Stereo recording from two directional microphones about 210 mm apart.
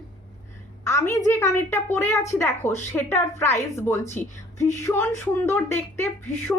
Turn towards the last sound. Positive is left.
turn(degrees=10)  # may be behind; listen again after turning